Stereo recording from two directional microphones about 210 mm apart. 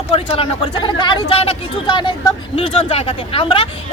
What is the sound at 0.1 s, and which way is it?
Speech, 25° left (ahead or behind).